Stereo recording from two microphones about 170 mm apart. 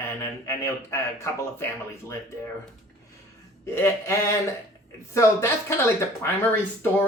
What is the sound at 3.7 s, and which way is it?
Speech, 15° left (ahead or behind).